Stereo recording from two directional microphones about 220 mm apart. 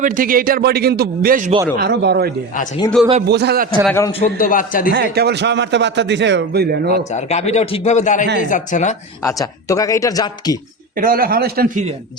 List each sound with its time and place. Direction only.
0.0 s a man's voice: 40° right (ahead or behind)
3.8 s speech: 10° left (ahead or behind)
4.4 s a man's voice: 40° left (ahead or behind)
4.9 s a man's voice: 45° right (ahead or behind)
7.1 s a man's voice: 30° left (ahead or behind)
9.2 s speech: 15° left (ahead or behind)
10.9 s a man's voice: 40° right (ahead or behind)